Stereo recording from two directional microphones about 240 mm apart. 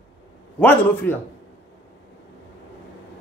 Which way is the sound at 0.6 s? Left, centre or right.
Centre.